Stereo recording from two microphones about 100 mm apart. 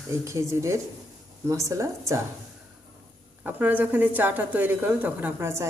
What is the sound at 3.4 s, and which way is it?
A woman's voice, 15° right (ahead or behind).